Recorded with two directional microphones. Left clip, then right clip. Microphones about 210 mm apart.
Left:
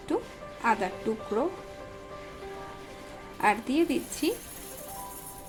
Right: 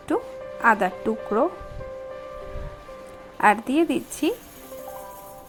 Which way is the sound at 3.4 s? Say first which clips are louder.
Right 6 dB; 20° right (ahead or behind).